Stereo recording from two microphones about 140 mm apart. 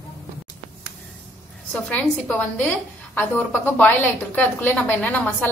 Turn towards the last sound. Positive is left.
turn(degrees=10)  # may be behind; listen again after turning